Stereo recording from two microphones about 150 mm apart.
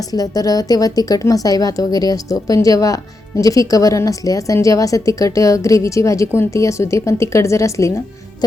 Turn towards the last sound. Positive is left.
turn(degrees=20)  # may be behind; listen again after turning